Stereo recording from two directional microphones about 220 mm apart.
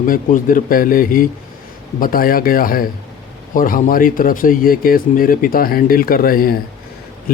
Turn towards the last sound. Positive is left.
turn(degrees=40)  # may be behind; listen again after turning